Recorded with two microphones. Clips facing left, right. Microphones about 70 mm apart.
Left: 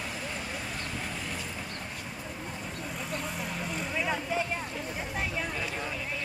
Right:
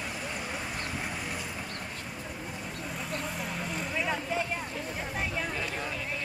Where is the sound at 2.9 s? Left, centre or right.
Centre.